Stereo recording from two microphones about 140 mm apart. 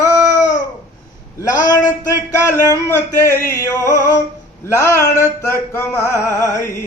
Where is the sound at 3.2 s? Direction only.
20° left (ahead or behind).